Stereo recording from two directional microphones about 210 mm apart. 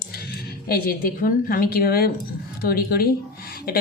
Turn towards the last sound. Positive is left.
turn(degrees=45)  # may be behind; listen again after turning